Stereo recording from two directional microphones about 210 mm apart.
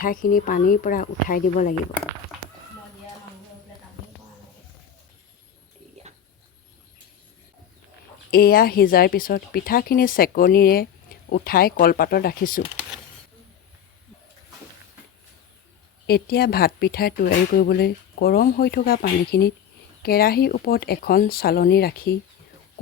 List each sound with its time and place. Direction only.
0.0 s speech: 40° left (ahead or behind)
8.3 s speech: 45° left (ahead or behind)
16.0 s speech: 50° left (ahead or behind)